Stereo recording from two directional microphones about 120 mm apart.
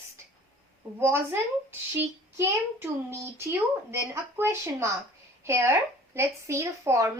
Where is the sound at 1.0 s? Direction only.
20° right (ahead or behind).